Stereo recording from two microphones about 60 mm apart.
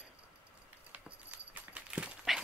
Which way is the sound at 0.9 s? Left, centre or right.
Right.